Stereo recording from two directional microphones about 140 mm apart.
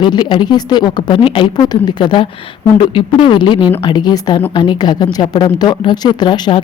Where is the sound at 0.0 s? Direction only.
35° left (ahead or behind).